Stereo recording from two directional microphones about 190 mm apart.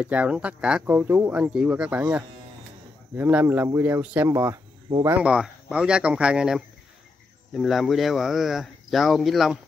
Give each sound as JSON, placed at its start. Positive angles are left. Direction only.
{"t": 0.0, "sound": "speech", "side_deg": -5}
{"t": 4.8, "sound": "speech", "side_deg": -25}
{"t": 5.2, "sound": "speech", "side_deg": -5}